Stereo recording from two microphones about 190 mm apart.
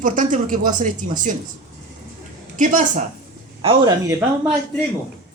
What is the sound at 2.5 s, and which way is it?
Speech, 40° right (ahead or behind).